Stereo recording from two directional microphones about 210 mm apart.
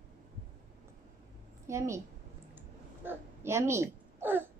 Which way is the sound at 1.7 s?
15° right (ahead or behind).